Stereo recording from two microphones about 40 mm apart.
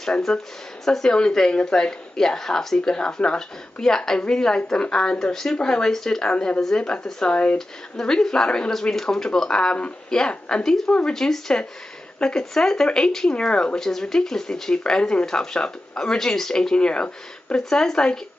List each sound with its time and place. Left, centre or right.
0.3 s speech: centre
7.0 s speech: centre
7.2 s speech: left
7.5 s speech: centre
11.1 s speech: centre
16.7 s speech: left
17.6 s speech: centre